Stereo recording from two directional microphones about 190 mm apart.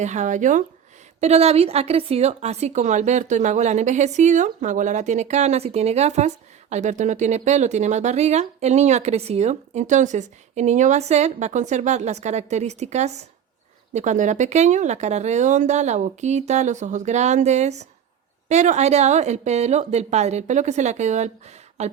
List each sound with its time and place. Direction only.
0.0 s a woman's voice: 40° right (ahead or behind)